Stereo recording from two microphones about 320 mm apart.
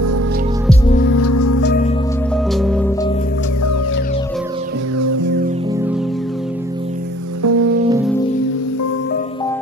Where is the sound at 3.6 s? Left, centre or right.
Left.